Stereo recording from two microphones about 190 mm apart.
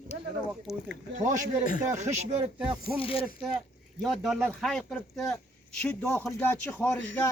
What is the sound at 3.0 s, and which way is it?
Speech, 30° left (ahead or behind).